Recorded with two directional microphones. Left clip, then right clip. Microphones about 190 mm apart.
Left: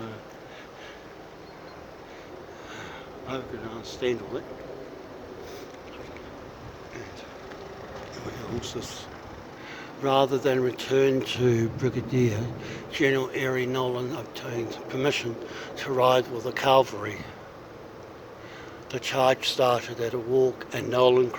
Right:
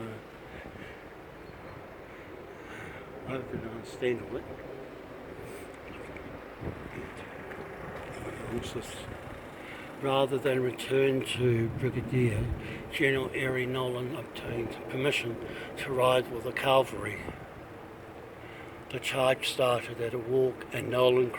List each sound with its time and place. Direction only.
4.0 s speech: 10° left (ahead or behind)
10.0 s a man's voice: 25° left (ahead or behind)
18.9 s a man's voice: 25° left (ahead or behind)